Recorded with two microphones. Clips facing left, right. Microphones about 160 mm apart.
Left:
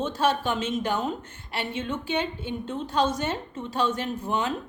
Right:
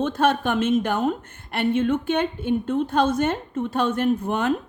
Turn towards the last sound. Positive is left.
turn(degrees=-55)  # may be behind; listen again after turning